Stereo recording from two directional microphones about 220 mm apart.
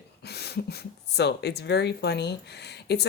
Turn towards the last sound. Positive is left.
turn(degrees=45)  # may be behind; listen again after turning